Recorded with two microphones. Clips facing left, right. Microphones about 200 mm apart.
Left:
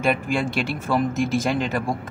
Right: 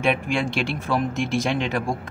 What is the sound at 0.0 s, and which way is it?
Speech, centre (ahead or behind).